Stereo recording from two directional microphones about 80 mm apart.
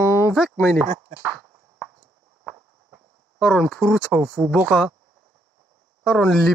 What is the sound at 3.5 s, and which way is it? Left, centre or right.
Speech, centre.